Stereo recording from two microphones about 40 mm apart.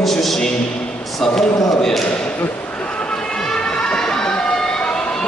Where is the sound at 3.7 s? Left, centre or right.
Centre.